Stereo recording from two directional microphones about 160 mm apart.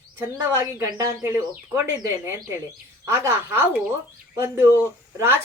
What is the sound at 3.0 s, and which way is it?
A woman's voice, 15° right (ahead or behind).